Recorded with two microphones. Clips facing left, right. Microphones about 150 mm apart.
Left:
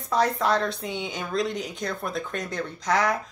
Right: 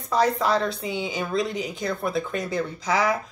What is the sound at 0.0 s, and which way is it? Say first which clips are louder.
A woman's voice: right 2 dB; centre (ahead or behind).